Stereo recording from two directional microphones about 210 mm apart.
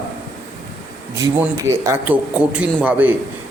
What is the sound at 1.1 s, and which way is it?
A man's voice, 15° right (ahead or behind).